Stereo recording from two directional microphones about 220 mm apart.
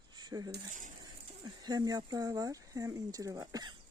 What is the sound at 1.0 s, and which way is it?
Speech, 20° right (ahead or behind).